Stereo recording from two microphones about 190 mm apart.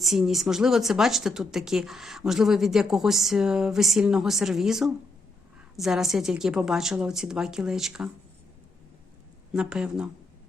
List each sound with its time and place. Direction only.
0.0 s speech: centre (ahead or behind)
9.5 s speech: 5° right (ahead or behind)